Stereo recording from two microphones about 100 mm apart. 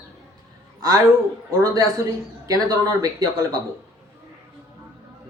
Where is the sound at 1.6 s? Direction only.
30° right (ahead or behind).